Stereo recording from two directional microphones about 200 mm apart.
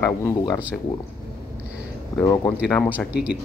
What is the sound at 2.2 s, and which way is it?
Speech, 15° left (ahead or behind).